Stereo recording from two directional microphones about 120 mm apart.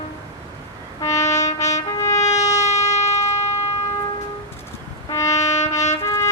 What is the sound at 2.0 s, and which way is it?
Trumpet, 25° left (ahead or behind).